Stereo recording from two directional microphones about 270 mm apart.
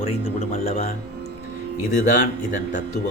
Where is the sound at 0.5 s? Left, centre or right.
Left.